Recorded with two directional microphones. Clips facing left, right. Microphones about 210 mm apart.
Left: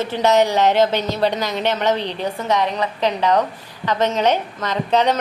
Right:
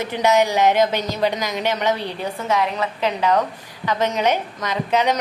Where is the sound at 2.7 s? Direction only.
35° left (ahead or behind).